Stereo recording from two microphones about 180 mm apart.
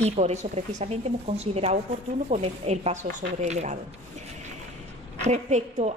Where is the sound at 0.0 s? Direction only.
40° right (ahead or behind).